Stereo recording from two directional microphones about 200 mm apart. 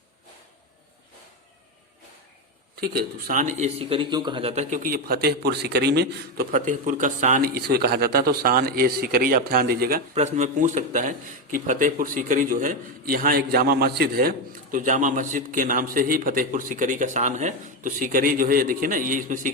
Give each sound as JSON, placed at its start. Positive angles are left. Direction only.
{"t": 2.8, "sound": "a man's voice", "side_deg": -50}
{"t": 10.2, "sound": "a man's voice", "side_deg": -35}